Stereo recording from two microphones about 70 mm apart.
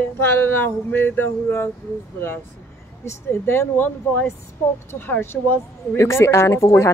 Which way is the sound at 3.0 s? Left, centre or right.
Left.